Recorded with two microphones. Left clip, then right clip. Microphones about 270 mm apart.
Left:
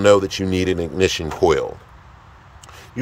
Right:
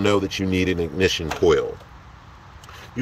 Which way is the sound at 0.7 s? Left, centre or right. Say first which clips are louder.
Left 1 dB; centre.